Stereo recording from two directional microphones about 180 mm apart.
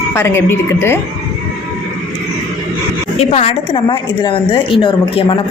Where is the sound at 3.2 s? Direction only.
35° left (ahead or behind).